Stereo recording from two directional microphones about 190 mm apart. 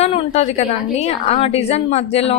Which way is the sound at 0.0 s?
30° left (ahead or behind).